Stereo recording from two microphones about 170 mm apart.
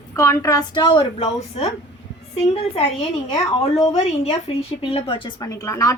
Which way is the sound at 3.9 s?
35° left (ahead or behind).